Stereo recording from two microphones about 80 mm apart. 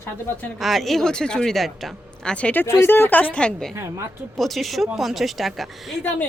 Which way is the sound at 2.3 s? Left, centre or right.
Centre.